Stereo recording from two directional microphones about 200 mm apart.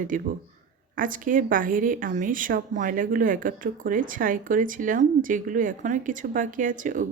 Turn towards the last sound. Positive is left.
turn(degrees=-40)  # may be behind; listen again after turning